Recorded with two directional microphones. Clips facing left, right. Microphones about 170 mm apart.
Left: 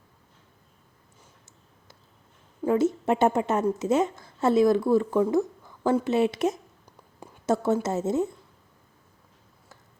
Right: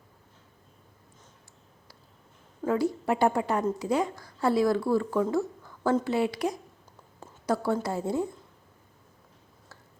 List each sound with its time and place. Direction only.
2.6 s speech: 20° left (ahead or behind)